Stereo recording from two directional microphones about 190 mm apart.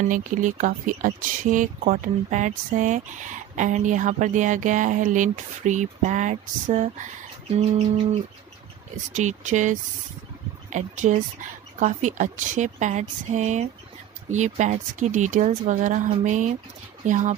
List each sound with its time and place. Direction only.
0.1 s speech: 40° right (ahead or behind)